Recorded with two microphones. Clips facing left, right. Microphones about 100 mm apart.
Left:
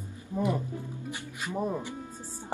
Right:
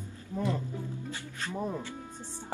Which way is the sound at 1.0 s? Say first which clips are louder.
Left 1 dB; 15° left (ahead or behind).